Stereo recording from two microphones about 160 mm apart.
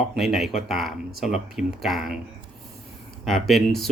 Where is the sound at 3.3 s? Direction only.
Centre (ahead or behind).